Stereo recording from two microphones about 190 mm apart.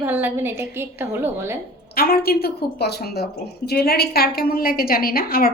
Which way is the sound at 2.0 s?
55° left (ahead or behind).